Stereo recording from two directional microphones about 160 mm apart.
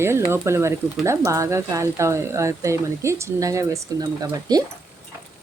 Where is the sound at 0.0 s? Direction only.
15° right (ahead or behind).